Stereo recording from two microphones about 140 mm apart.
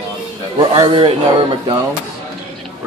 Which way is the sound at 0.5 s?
30° right (ahead or behind).